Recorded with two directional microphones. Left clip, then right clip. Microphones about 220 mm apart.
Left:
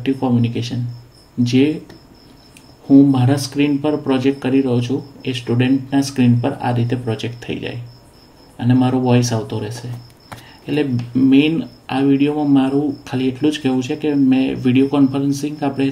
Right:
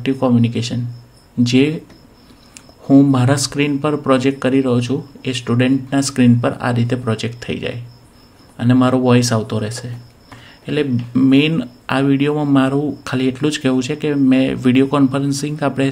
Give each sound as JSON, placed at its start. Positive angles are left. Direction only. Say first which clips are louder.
{"t": 0.0, "sound": "speech", "louder": "right 2 dB", "side_deg": -50}
{"t": 2.9, "sound": "speech", "louder": "even", "side_deg": -50}